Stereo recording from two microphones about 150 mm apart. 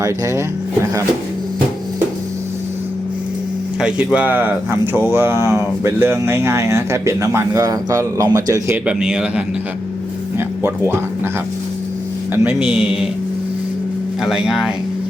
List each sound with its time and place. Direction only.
0.0 s speech: 20° right (ahead or behind)
3.8 s speech: 5° right (ahead or behind)
8.9 s a man's voice: 5° right (ahead or behind)
12.3 s speech: 10° right (ahead or behind)
14.2 s a man's voice: 5° right (ahead or behind)